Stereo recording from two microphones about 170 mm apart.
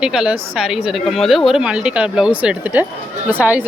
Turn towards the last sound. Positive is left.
turn(degrees=-10)  # may be behind; listen again after turning